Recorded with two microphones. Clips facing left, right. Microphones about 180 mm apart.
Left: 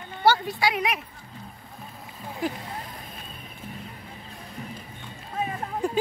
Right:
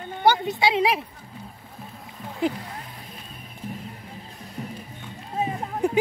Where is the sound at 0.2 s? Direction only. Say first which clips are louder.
Right 2 dB; 20° right (ahead or behind).